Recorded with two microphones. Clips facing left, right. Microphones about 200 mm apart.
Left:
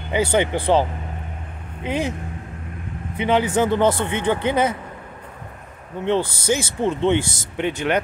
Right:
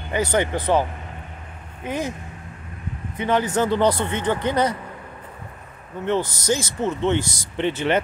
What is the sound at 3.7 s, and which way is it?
Speech, 20° left (ahead or behind).